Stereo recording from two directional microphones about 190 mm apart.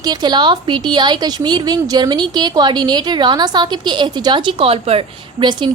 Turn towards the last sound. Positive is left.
turn(degrees=-25)  # may be behind; listen again after turning